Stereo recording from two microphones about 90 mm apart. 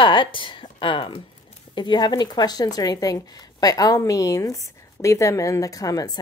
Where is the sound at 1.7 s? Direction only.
55° left (ahead or behind).